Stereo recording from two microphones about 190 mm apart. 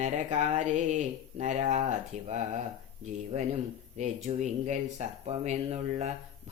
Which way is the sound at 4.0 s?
40° right (ahead or behind).